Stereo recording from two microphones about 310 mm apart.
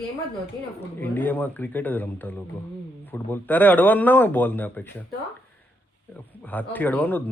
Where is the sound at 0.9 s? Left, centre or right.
Centre.